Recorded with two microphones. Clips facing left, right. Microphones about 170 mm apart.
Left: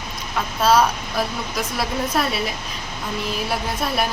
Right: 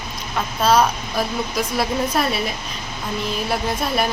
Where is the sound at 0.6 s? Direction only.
5° left (ahead or behind).